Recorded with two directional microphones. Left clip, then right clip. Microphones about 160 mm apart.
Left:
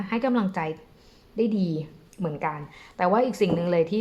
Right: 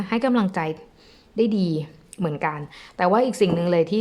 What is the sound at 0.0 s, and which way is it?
A woman's voice, 30° right (ahead or behind).